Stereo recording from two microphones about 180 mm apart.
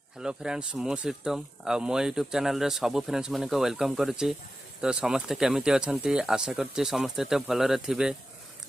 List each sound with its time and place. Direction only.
0.2 s speech: 5° right (ahead or behind)